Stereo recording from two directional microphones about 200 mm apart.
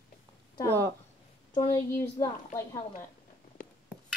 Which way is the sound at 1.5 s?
15° left (ahead or behind).